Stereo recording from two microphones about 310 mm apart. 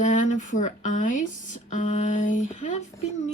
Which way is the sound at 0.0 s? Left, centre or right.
Left.